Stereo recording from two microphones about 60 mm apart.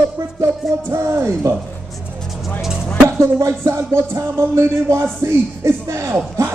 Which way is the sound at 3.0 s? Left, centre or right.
Right.